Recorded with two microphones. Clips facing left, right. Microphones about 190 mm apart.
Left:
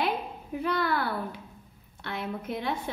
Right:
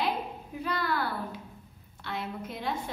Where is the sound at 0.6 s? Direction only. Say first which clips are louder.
Left 3 dB; 60° left (ahead or behind).